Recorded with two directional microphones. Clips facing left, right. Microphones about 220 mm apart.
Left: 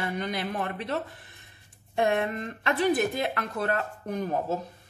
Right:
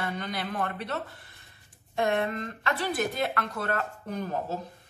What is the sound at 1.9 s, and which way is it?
Speech, 15° left (ahead or behind).